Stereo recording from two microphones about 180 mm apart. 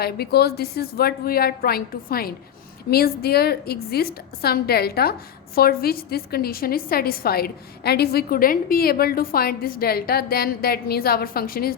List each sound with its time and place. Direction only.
0.0 s a woman's voice: 60° left (ahead or behind)